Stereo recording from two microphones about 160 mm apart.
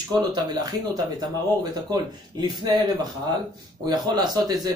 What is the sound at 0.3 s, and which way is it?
Speech, 25° right (ahead or behind).